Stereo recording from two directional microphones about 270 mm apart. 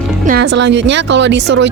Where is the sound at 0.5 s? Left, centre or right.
Right.